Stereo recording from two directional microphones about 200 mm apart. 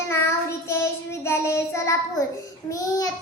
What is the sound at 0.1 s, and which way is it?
Child singing, 10° left (ahead or behind).